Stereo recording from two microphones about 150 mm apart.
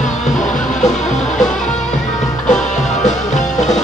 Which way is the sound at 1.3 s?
5° left (ahead or behind).